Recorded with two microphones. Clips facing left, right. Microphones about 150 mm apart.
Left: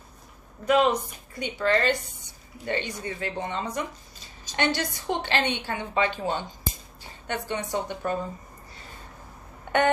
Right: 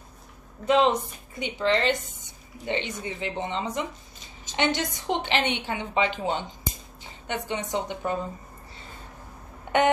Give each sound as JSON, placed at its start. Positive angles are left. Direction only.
{"t": 0.7, "sound": "a woman's voice", "side_deg": -25}